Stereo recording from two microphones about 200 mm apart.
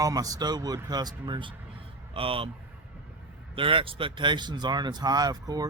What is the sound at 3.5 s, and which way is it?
A man's voice, 25° right (ahead or behind).